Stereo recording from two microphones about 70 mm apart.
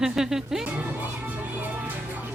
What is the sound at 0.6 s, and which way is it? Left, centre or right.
Speech, right.